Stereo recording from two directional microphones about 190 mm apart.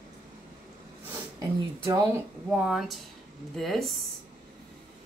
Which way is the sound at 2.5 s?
5° right (ahead or behind).